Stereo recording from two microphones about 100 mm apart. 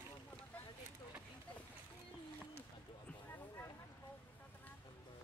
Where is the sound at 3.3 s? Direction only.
25° left (ahead or behind).